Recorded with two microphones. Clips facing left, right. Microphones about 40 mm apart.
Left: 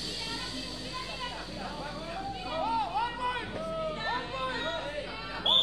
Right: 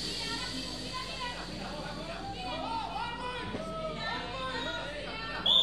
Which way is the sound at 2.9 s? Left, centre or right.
Centre.